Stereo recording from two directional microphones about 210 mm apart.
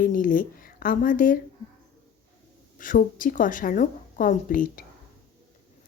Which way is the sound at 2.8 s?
40° left (ahead or behind).